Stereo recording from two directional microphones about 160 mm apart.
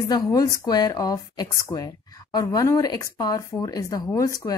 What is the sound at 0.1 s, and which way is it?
Speech, 20° left (ahead or behind).